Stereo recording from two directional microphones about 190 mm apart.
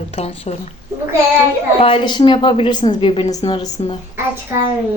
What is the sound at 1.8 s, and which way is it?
A woman's voice, 30° left (ahead or behind).